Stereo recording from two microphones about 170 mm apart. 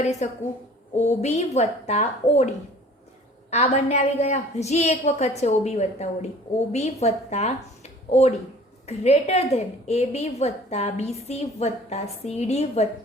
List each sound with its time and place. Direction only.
0.0 s a woman's voice: 40° left (ahead or behind)